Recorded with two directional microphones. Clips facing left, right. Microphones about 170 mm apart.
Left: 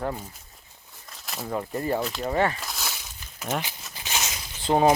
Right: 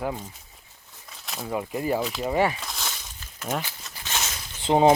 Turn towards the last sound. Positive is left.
turn(degrees=-20)  # may be behind; listen again after turning